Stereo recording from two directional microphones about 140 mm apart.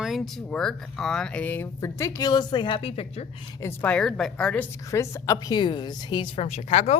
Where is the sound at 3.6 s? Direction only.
10° left (ahead or behind).